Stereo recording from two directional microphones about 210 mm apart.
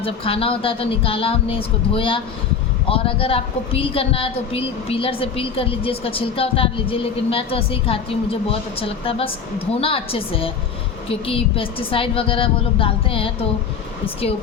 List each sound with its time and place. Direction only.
0.0 s a woman's voice: 25° left (ahead or behind)